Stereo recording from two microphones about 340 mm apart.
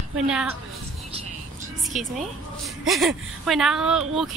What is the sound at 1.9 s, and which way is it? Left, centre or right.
Speech, centre.